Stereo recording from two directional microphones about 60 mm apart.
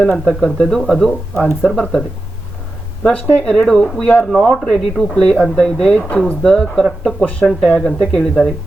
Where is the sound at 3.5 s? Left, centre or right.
Centre.